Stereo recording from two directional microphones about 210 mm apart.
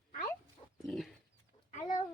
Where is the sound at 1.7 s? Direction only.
35° left (ahead or behind).